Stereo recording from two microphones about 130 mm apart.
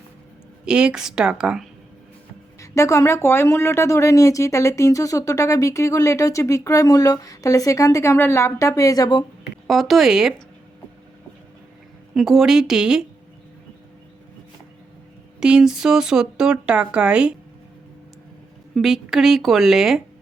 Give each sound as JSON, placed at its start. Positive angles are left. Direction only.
{"t": 0.6, "sound": "speech", "side_deg": -5}
{"t": 2.6, "sound": "speech", "side_deg": 25}
{"t": 9.6, "sound": "speech", "side_deg": 0}
{"t": 12.1, "sound": "speech", "side_deg": 0}
{"t": 15.4, "sound": "speech", "side_deg": -5}
{"t": 18.7, "sound": "speech", "side_deg": 0}